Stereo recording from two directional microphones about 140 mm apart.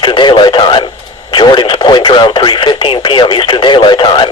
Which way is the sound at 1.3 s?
35° left (ahead or behind).